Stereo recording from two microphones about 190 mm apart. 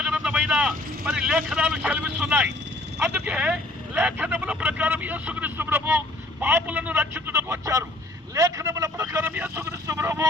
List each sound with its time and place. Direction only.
0.0 s speech: 5° right (ahead or behind)